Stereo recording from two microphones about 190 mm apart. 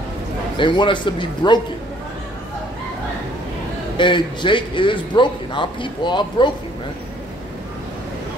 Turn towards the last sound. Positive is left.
turn(degrees=25)  # may be behind; listen again after turning